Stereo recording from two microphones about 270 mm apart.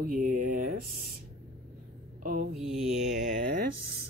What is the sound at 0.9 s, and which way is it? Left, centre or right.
Speech, right.